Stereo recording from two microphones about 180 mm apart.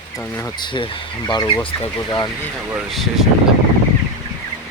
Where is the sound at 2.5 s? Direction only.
5° right (ahead or behind).